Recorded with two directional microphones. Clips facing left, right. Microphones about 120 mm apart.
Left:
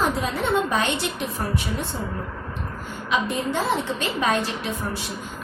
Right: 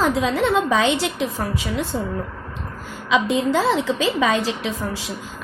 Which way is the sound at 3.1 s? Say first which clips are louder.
Right 6 dB; 90° right.